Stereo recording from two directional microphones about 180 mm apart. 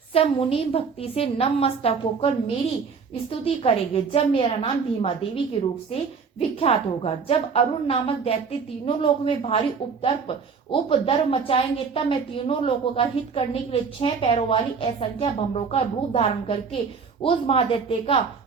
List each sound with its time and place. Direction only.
0.1 s speech: 30° left (ahead or behind)
6.6 s speech: 30° left (ahead or behind)